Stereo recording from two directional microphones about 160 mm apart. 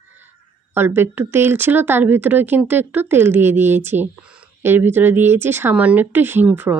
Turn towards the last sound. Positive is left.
turn(degrees=-10)  # may be behind; listen again after turning